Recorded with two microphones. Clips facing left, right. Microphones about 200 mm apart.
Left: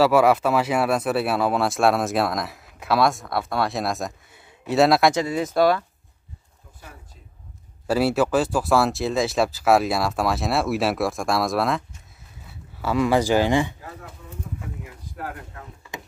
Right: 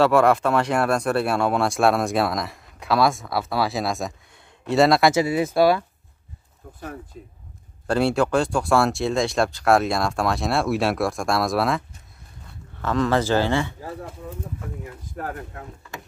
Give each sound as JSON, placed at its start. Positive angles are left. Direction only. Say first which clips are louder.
{"t": 0.0, "sound": "speech", "louder": "even", "side_deg": 5}
{"t": 7.2, "sound": "speech", "louder": "right 13 dB", "side_deg": -55}
{"t": 7.8, "sound": "speech", "louder": "even", "side_deg": 5}